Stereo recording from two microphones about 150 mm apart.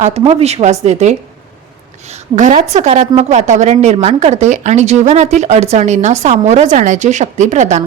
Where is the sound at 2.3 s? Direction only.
55° right (ahead or behind).